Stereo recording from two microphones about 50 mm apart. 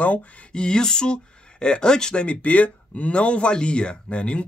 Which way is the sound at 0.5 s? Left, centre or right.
Centre.